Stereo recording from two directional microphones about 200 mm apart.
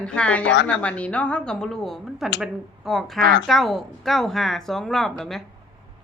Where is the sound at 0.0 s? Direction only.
5° left (ahead or behind).